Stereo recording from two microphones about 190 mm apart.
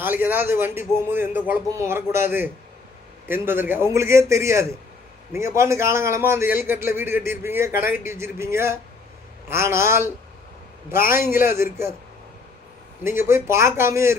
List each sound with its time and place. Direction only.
0.0 s a man's voice: 10° right (ahead or behind)
7.7 s a man's voice: 50° left (ahead or behind)
8.0 s a man's voice: 15° right (ahead or behind)
11.5 s a man's voice: 15° right (ahead or behind)
13.1 s a man's voice: 10° right (ahead or behind)